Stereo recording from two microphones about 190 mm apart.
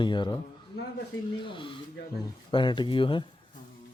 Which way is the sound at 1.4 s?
25° left (ahead or behind).